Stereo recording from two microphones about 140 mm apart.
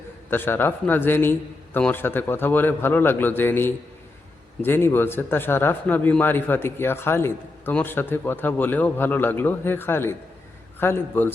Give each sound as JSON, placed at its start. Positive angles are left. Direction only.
{"t": 0.3, "sound": "a man's voice", "side_deg": 15}